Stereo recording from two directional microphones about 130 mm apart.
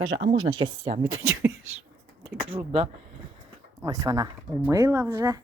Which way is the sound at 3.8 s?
30° right (ahead or behind).